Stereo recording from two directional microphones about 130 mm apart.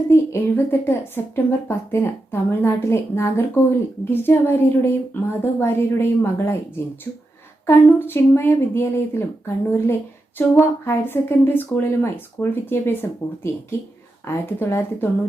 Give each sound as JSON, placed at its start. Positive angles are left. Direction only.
{"t": 0.1, "sound": "a woman's voice", "side_deg": 20}
{"t": 7.7, "sound": "a woman's voice", "side_deg": 15}